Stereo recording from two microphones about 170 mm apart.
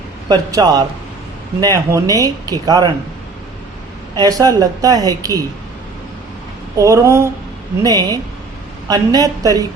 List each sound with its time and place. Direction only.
0.3 s speech: 25° right (ahead or behind)
4.2 s speech: 20° right (ahead or behind)
6.7 s speech: 20° right (ahead or behind)